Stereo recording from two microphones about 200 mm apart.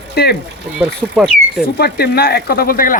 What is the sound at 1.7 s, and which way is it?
Speech, 50° left (ahead or behind).